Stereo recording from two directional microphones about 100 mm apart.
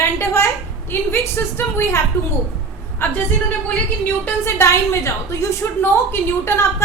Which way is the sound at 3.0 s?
25° left (ahead or behind).